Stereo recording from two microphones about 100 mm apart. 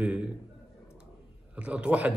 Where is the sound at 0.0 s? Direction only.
10° right (ahead or behind).